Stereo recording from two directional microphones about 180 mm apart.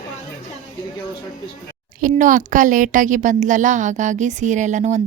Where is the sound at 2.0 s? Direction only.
50° right (ahead or behind).